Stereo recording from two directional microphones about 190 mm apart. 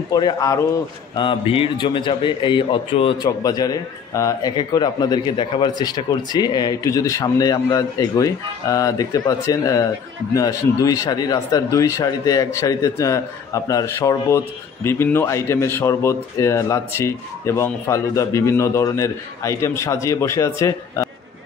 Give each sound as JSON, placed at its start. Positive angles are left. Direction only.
{"t": 0.1, "sound": "a man's voice", "side_deg": 20}